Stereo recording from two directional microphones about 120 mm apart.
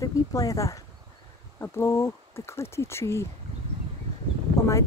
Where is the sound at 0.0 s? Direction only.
30° left (ahead or behind).